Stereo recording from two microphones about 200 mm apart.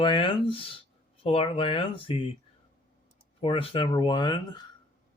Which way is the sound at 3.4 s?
25° left (ahead or behind).